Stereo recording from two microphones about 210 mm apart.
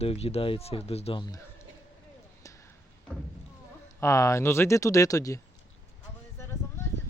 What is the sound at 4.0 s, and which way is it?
Speech, 15° left (ahead or behind).